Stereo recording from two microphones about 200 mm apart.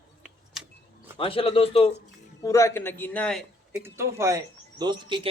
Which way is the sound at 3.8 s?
15° right (ahead or behind).